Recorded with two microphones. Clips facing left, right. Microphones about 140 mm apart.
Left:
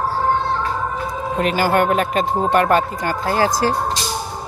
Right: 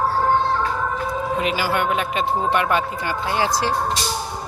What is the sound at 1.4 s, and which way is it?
Speech, 50° left (ahead or behind).